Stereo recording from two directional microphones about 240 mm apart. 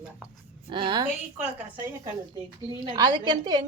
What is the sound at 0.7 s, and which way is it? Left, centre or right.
Speech, centre.